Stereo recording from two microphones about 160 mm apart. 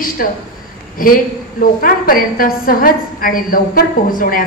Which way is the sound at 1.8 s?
60° left (ahead or behind).